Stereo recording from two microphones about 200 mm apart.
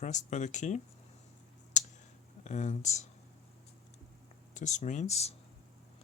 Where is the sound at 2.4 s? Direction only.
35° left (ahead or behind).